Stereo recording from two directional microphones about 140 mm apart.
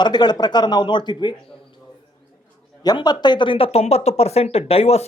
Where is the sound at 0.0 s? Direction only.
30° left (ahead or behind).